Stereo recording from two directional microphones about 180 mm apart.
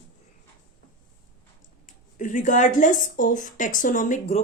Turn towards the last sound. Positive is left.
turn(degrees=40)  # may be behind; listen again after turning